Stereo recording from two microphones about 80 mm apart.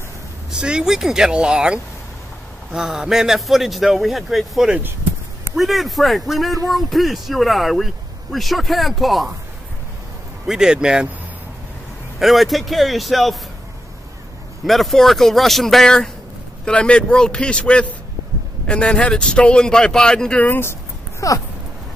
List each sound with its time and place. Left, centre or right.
0.5 s speech: centre
10.4 s speech: centre
12.2 s speech: centre
14.6 s speech: centre
20.4 s speech: left
21.2 s speech: left